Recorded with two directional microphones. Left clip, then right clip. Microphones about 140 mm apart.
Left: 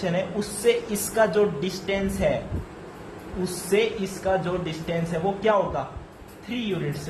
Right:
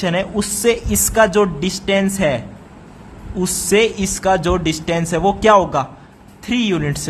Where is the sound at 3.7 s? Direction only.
75° right (ahead or behind); by 5.0 s 90° right.